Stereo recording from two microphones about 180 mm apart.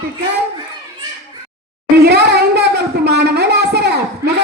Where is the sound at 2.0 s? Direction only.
65° right (ahead or behind).